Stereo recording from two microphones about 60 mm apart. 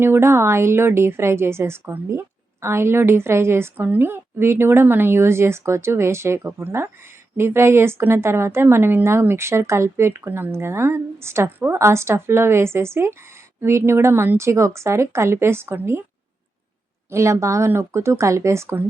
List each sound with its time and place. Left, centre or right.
0.0 s a woman's voice: right
17.1 s a woman's voice: right